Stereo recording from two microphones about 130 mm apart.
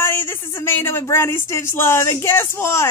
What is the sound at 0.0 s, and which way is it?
Speech, 20° left (ahead or behind).